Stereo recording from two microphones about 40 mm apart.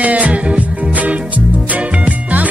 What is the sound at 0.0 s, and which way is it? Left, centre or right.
Music, right.